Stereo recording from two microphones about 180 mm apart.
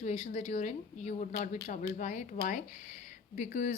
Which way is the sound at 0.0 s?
45° left (ahead or behind).